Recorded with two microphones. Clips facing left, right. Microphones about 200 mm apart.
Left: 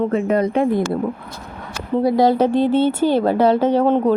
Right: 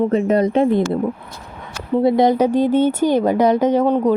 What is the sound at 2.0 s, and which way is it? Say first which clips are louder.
Speech: right 1 dB; 20° right (ahead or behind).